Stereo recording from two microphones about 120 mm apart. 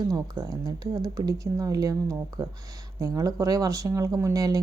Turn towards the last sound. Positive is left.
turn(degrees=-30)  # may be behind; listen again after turning